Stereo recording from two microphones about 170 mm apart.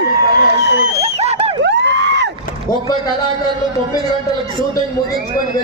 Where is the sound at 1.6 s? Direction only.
90° right.